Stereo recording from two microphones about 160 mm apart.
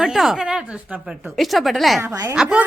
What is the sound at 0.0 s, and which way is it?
A woman's voice, centre (ahead or behind).